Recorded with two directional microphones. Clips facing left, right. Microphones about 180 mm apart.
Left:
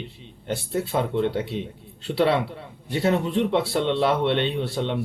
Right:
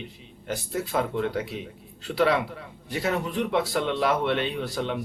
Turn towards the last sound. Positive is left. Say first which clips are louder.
# left 3 dB
turn(degrees=30)  # may be behind; listen again after turning